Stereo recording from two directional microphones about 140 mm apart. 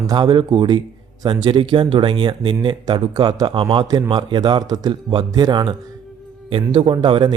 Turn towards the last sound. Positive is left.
turn(degrees=-35)  # may be behind; listen again after turning